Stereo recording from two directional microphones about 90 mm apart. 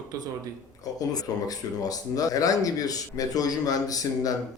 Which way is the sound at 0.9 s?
45° left (ahead or behind).